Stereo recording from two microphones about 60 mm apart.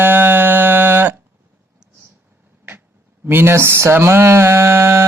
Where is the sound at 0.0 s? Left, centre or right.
Right.